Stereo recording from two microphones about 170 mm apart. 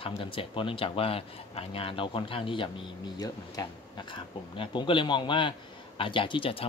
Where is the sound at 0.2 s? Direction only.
30° left (ahead or behind).